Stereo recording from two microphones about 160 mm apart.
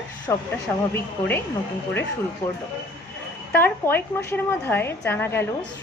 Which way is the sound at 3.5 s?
10° left (ahead or behind).